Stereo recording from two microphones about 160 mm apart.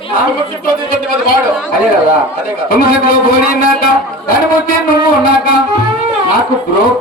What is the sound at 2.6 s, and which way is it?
Speech, 70° left (ahead or behind).